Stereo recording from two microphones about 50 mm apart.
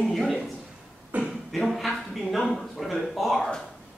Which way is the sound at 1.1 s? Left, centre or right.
Right.